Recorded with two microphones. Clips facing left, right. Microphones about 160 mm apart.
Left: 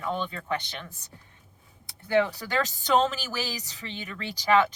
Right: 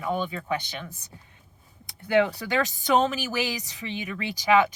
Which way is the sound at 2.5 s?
15° right (ahead or behind).